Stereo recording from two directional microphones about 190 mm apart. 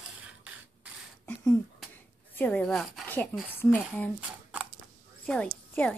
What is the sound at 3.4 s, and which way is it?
Speech, 10° left (ahead or behind).